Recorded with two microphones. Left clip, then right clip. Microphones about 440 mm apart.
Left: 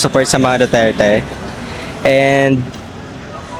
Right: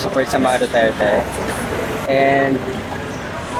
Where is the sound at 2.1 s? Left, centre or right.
Left.